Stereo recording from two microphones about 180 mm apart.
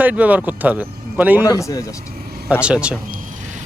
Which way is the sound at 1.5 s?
15° left (ahead or behind).